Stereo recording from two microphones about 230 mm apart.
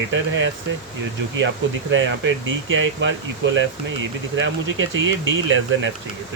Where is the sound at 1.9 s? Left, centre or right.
Right.